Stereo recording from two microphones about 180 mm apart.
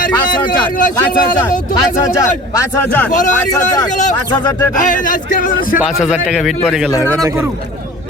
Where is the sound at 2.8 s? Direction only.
10° left (ahead or behind).